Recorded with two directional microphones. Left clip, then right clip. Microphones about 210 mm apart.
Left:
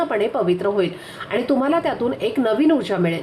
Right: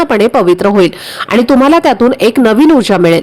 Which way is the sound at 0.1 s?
50° right (ahead or behind).